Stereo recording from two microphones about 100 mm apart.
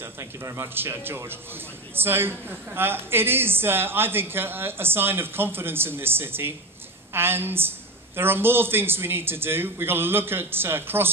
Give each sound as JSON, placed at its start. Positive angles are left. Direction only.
{"t": 0.0, "sound": "a woman's voice", "side_deg": -30}